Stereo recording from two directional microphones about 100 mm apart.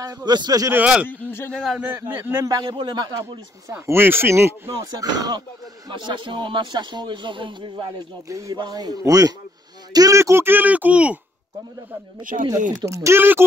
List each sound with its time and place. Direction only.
0.0 s speech: 40° right (ahead or behind)
0.7 s speech: 20° right (ahead or behind)
1.0 s speech: 20° left (ahead or behind)
1.5 s a man's voice: centre (ahead or behind)
1.8 s speech: 20° right (ahead or behind)
2.7 s speech: 50° right (ahead or behind)
3.2 s speech: 30° right (ahead or behind)
5.0 s speech: 45° right (ahead or behind)
8.3 s speech: 35° right (ahead or behind); by 11.1 s 15° right (ahead or behind)
12.4 s speech: 35° right (ahead or behind)